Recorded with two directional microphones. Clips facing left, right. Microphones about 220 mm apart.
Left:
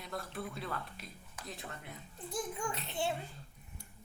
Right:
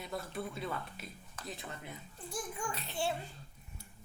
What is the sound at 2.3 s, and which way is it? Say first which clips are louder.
Speech: left 2 dB; 20° left (ahead or behind).